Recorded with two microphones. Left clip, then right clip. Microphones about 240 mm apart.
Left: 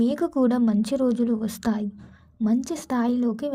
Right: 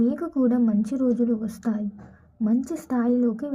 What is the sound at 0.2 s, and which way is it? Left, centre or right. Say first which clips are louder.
A woman's voice: left 1 dB; left.